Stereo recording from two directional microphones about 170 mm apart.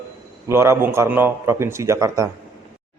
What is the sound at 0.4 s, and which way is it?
A man's voice, 15° right (ahead or behind).